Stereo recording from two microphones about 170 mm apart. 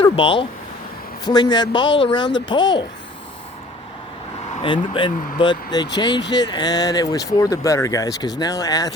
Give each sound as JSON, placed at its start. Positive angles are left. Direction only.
{"t": 0.0, "sound": "speech", "side_deg": 30}
{"t": 4.6, "sound": "speech", "side_deg": 30}